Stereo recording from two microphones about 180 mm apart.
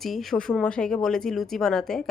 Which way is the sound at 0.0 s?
Centre (ahead or behind).